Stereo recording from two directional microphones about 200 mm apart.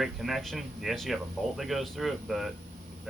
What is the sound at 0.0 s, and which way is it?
Speech, centre (ahead or behind).